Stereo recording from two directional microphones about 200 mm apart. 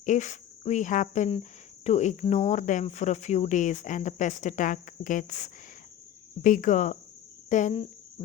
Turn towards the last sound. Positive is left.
turn(degrees=35)  # may be behind; listen again after turning